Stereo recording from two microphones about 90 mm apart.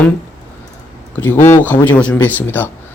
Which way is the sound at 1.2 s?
25° left (ahead or behind).